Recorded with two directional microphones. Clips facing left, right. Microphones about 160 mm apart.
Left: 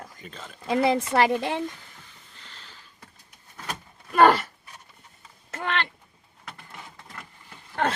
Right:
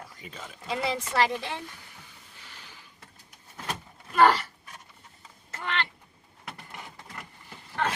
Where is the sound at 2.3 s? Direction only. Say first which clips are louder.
Left 1 dB; 10° right (ahead or behind).